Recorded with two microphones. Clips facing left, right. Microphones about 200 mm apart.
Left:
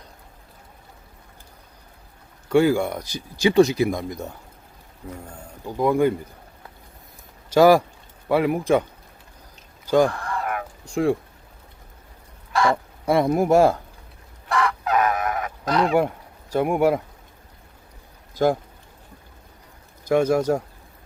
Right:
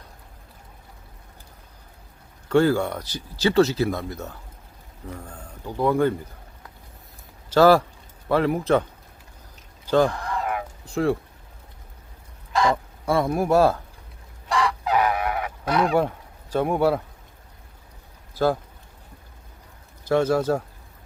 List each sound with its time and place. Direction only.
2.5 s speech: 10° left (ahead or behind)
7.5 s speech: 10° left (ahead or behind)
10.1 s a sound: 15° right (ahead or behind)
10.8 s speech: 15° left (ahead or behind)
12.7 s speech: 20° left (ahead or behind)
14.5 s fowl: 10° right (ahead or behind)
15.9 s speech: 10° left (ahead or behind)
20.1 s speech: 15° left (ahead or behind)